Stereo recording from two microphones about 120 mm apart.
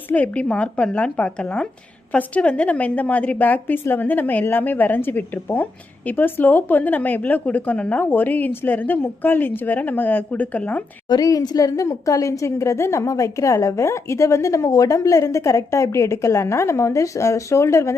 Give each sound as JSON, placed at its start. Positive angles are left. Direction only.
{"t": 0.1, "sound": "a woman's voice", "side_deg": 10}
{"t": 11.1, "sound": "a woman's voice", "side_deg": 30}